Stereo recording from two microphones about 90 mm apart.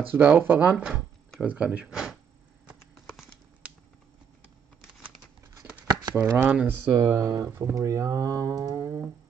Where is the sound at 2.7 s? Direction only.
5° right (ahead or behind).